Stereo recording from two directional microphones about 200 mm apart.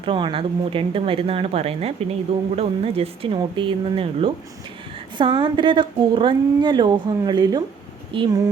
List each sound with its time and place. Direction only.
0.0 s a woman's voice: 25° right (ahead or behind)